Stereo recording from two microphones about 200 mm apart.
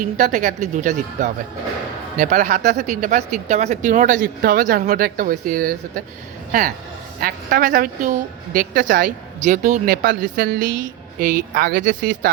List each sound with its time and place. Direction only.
0.0 s a woman's voice: 40° right (ahead or behind)